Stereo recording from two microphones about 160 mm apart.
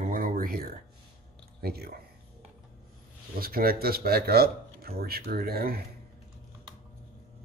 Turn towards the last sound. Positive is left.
turn(degrees=-75)  # may be behind; listen again after turning